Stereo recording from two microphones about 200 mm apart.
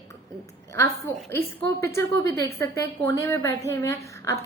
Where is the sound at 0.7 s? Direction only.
15° left (ahead or behind).